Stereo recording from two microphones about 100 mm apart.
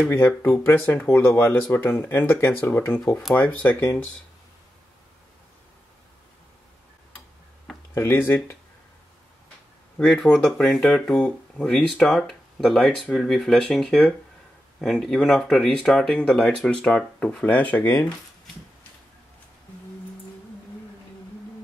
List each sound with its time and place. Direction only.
0.4 s speech: 20° left (ahead or behind)
7.9 s speech: 25° left (ahead or behind)
9.9 s speech: 5° left (ahead or behind)